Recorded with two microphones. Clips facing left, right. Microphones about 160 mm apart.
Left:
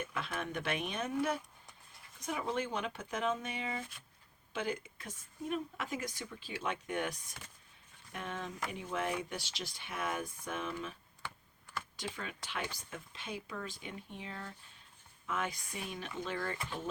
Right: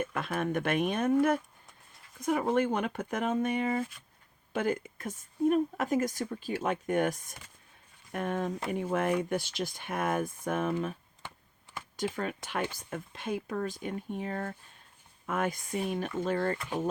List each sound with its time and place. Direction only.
0.0 s a woman's voice: 55° right (ahead or behind)
11.9 s a woman's voice: 50° right (ahead or behind)